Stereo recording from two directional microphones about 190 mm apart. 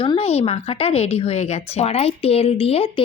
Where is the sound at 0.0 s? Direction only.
30° left (ahead or behind).